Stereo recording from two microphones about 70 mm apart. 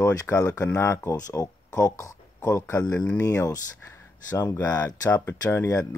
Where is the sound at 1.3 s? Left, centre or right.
Left.